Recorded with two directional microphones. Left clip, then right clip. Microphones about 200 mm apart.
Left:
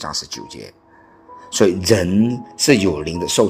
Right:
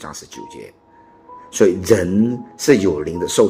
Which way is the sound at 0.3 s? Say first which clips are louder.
Left 2 dB; 25° left (ahead or behind).